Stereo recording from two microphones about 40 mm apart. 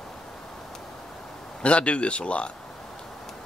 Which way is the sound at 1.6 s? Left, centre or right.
Left.